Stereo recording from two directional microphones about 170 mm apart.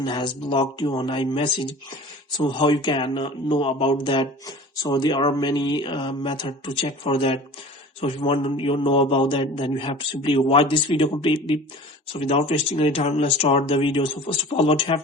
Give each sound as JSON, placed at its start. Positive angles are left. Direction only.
{"t": 0.0, "sound": "a man's voice", "side_deg": 25}